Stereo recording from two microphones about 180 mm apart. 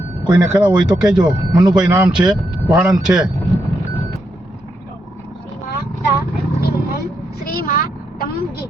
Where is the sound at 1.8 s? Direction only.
10° right (ahead or behind).